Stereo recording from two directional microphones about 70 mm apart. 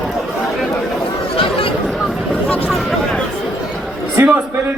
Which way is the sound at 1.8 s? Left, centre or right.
Centre.